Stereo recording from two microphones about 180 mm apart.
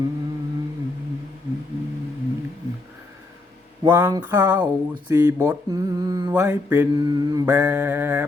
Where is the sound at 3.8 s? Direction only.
20° right (ahead or behind).